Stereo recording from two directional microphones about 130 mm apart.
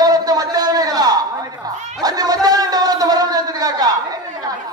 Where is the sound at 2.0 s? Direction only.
30° right (ahead or behind).